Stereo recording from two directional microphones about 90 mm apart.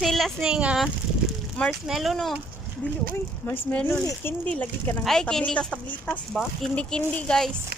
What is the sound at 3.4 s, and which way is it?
Speech, 25° left (ahead or behind).